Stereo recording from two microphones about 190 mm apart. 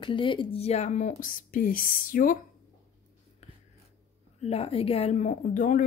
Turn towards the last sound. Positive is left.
turn(degrees=40)  # may be behind; listen again after turning